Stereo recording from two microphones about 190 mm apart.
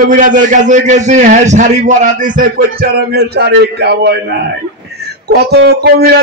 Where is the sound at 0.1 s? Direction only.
40° right (ahead or behind).